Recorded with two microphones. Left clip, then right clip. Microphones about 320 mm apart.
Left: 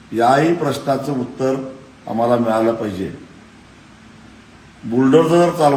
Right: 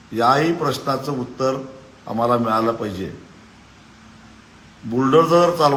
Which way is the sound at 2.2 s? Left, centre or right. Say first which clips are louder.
Left 2 dB; centre.